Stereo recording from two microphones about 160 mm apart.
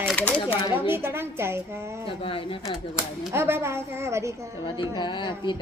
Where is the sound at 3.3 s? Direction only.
15° right (ahead or behind).